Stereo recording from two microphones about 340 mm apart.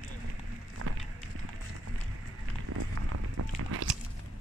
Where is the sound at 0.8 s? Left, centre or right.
Right.